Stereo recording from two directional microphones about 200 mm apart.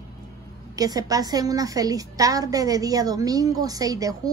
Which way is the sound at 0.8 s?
20° right (ahead or behind).